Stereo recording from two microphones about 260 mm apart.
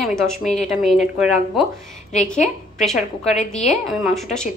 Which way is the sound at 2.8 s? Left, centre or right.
Centre.